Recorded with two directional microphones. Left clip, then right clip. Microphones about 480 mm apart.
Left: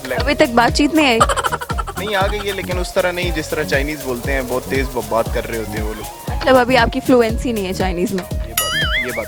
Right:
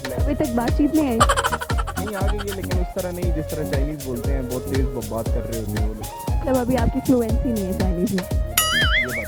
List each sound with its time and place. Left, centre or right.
0.3 s speech: centre
2.5 s music: centre
4.3 s music: centre